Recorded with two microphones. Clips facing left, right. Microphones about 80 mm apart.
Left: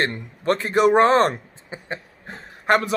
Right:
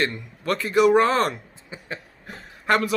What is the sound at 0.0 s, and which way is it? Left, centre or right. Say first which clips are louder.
Speech: left 2 dB; left.